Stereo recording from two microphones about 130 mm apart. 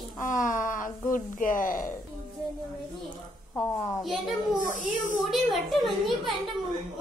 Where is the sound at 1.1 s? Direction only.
90° left.